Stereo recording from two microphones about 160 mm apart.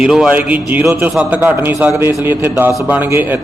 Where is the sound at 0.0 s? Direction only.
5° right (ahead or behind).